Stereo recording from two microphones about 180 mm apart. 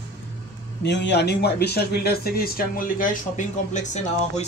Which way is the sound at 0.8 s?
75° left (ahead or behind).